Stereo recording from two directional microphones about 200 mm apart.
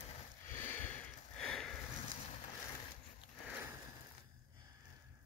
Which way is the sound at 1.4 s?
5° left (ahead or behind).